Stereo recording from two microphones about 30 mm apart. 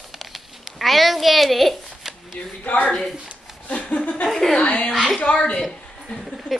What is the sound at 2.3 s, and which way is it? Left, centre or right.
Speech, left.